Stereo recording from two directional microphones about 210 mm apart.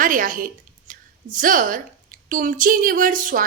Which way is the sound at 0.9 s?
40° right (ahead or behind).